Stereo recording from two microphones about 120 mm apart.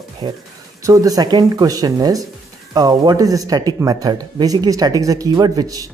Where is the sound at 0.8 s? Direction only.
30° right (ahead or behind).